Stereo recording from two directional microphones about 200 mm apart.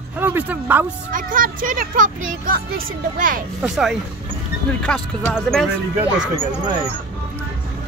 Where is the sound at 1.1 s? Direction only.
45° right (ahead or behind).